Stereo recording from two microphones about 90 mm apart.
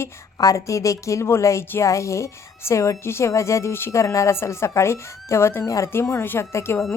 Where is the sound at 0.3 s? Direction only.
40° left (ahead or behind).